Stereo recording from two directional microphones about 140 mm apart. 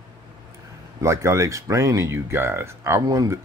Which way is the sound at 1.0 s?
20° right (ahead or behind).